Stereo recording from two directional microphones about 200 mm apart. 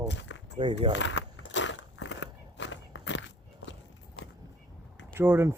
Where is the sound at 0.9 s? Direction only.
65° left (ahead or behind).